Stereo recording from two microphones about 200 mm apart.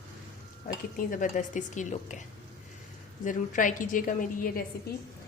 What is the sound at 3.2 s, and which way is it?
A woman's voice, 40° left (ahead or behind).